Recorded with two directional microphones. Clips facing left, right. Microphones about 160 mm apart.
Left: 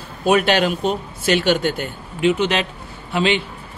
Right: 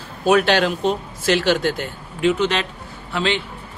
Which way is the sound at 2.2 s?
15° left (ahead or behind).